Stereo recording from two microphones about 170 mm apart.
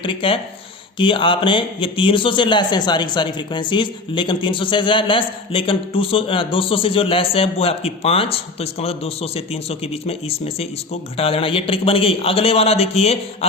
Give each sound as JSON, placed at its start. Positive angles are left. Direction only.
{"t": 0.0, "sound": "speech", "side_deg": 30}